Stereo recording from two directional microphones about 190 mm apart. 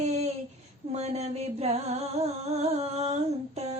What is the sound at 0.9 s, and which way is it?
Music, 35° right (ahead or behind).